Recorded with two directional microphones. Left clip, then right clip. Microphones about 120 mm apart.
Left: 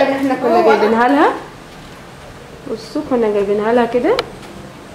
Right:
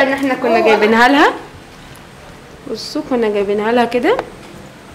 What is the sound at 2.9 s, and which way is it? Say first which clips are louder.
A woman's voice: left 1 dB; 40° right (ahead or behind).